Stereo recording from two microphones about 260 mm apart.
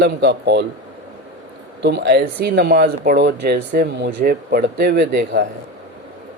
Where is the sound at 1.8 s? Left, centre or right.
Right.